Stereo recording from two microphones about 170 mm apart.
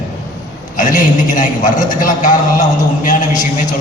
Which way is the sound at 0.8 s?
50° left (ahead or behind).